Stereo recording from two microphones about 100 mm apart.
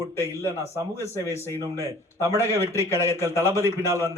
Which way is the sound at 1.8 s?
25° right (ahead or behind).